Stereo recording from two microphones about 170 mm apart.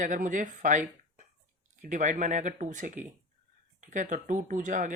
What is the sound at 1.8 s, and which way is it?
Speech, 45° right (ahead or behind).